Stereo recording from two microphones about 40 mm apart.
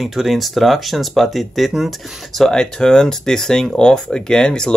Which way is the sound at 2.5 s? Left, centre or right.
Centre.